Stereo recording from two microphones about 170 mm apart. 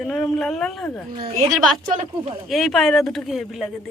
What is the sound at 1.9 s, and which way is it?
Speech, 40° right (ahead or behind).